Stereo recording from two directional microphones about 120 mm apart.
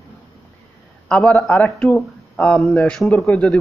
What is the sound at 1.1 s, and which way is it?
Speech, 10° left (ahead or behind).